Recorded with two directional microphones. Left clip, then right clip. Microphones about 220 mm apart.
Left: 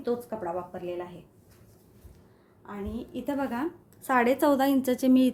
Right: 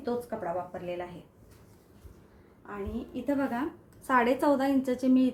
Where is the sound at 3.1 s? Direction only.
35° left (ahead or behind).